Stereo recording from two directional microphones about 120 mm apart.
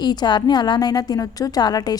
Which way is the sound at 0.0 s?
35° left (ahead or behind).